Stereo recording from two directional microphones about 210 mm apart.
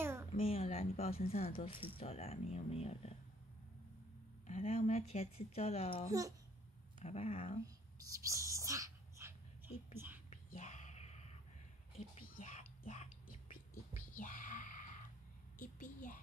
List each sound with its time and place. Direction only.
0.3 s speech: 30° left (ahead or behind)
4.5 s speech: 30° left (ahead or behind)
7.6 s speech: 15° right (ahead or behind)
8.5 s a sound: 15° right (ahead or behind)
9.9 s whispering: 10° right (ahead or behind)
10.3 s whispering: 35° left (ahead or behind)
15.6 s a sound: 35° left (ahead or behind)